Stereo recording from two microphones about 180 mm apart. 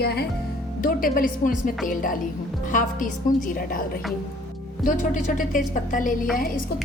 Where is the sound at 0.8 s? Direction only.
50° left (ahead or behind).